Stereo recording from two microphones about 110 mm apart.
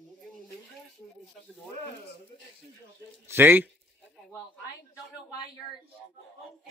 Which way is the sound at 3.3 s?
20° right (ahead or behind).